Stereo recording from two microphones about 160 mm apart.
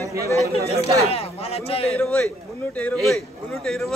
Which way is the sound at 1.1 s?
40° left (ahead or behind).